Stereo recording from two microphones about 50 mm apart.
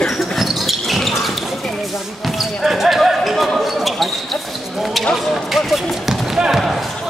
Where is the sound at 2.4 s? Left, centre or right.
Centre.